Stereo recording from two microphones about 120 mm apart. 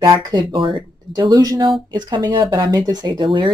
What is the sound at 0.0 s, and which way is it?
Speech, 40° right (ahead or behind).